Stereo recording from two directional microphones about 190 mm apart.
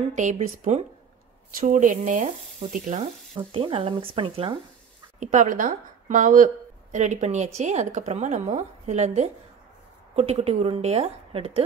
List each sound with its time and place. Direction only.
0.1 s a woman's voice: 40° right (ahead or behind)
3.5 s speech: 30° right (ahead or behind)
5.2 s a woman's voice: 40° right (ahead or behind)